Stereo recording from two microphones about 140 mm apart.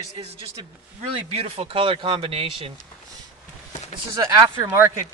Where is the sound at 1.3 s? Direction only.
45° right (ahead or behind).